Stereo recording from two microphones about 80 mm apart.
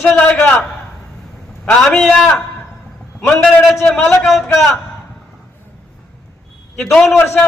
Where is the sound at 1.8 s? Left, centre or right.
Centre.